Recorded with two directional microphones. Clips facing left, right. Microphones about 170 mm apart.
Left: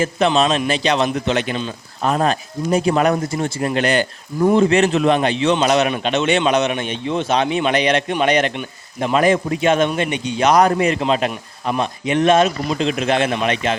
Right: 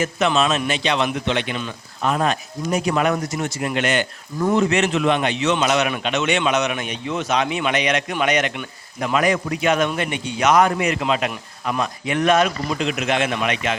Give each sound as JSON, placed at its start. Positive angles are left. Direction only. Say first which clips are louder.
{"t": 0.0, "sound": "a man's voice", "louder": "left 3 dB", "side_deg": 30}
{"t": 10.4, "sound": "a man's voice", "louder": "left 3 dB", "side_deg": 35}